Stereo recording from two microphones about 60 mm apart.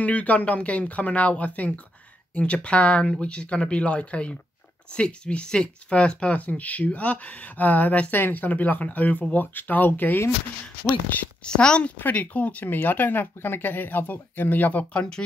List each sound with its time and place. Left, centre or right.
0.0 s speech: left
11.4 s a woman's voice: centre
12.0 s speech: left